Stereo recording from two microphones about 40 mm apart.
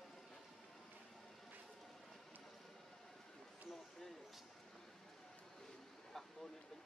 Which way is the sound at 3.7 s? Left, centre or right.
Centre.